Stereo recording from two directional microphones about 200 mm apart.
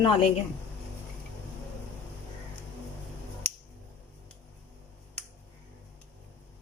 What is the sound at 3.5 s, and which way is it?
Finger snapping, 5° left (ahead or behind).